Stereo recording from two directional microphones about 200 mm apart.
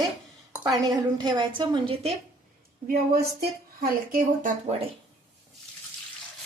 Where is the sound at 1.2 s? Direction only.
20° right (ahead or behind).